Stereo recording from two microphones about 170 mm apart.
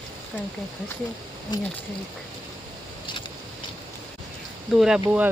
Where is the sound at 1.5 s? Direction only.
25° left (ahead or behind).